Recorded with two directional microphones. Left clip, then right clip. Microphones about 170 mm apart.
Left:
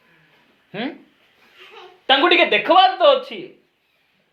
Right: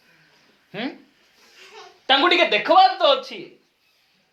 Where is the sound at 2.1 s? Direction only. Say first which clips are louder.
Left 2 dB; 15° left (ahead or behind).